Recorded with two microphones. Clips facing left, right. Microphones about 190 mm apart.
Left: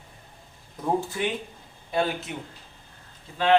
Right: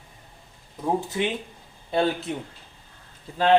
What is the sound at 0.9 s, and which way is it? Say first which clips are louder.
Speech: right 1 dB; 20° right (ahead or behind).